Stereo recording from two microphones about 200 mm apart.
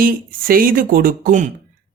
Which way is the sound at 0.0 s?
45° right (ahead or behind).